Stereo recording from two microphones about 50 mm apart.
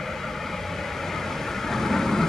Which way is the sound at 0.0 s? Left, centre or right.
Centre.